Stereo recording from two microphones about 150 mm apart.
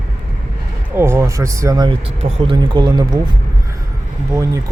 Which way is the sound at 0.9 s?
15° right (ahead or behind).